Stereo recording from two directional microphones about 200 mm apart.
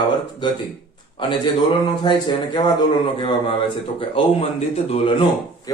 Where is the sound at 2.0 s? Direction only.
25° left (ahead or behind).